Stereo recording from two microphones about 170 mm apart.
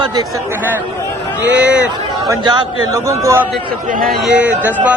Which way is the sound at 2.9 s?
15° right (ahead or behind).